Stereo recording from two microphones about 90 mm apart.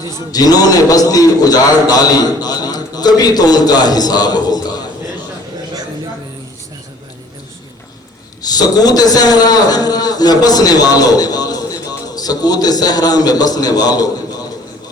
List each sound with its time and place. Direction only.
0.0 s a man's voice: 45° left (ahead or behind)
8.4 s a man's voice: 45° left (ahead or behind)